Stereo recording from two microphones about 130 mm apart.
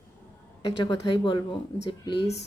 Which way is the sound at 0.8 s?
35° left (ahead or behind).